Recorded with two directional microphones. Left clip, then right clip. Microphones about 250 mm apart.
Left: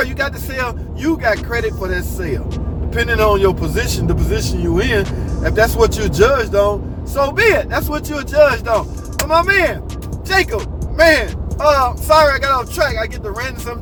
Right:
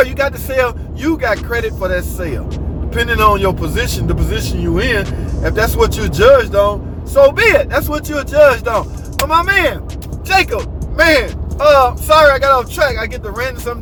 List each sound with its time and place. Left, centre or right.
0.0 s speech: centre